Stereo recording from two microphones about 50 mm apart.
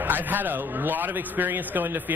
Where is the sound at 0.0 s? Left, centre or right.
Right.